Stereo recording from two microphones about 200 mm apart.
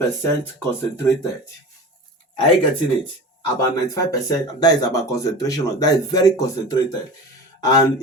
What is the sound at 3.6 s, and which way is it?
Speech, 15° left (ahead or behind).